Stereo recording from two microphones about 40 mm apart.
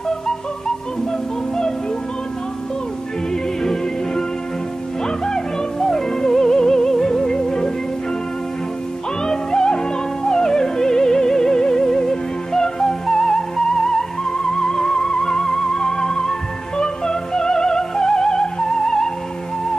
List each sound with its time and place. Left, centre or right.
3.6 s music: centre
9.2 s music: centre